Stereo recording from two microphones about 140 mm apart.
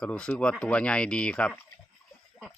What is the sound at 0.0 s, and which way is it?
Speech, 10° left (ahead or behind).